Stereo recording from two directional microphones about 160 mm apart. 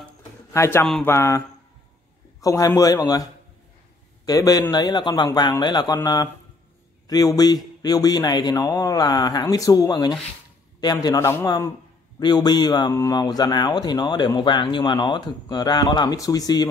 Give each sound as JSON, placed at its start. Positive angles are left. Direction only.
{"t": 0.5, "sound": "a man's voice", "side_deg": 15}
{"t": 1.0, "sound": "mantra", "side_deg": 15}
{"t": 2.4, "sound": "speech", "side_deg": 20}
{"t": 4.3, "sound": "speech", "side_deg": 25}